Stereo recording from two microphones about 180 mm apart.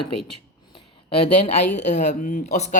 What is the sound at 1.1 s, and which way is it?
Speech, 30° left (ahead or behind).